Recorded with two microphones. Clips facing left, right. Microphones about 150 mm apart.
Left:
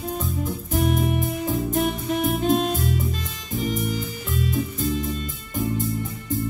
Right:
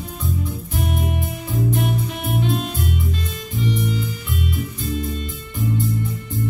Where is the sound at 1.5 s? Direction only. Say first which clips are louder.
Right 3 dB; 45° left (ahead or behind).